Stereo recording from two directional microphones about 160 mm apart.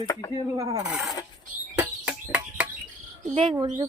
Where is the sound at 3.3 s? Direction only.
45° right (ahead or behind).